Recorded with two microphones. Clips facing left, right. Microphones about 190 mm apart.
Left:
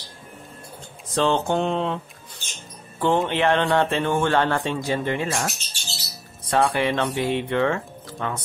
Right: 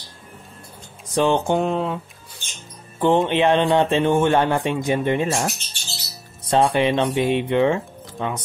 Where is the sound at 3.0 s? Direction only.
20° right (ahead or behind).